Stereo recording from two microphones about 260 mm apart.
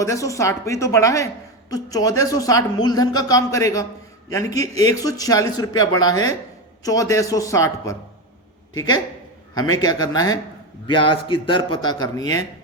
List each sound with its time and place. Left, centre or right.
0.0 s a man's voice: centre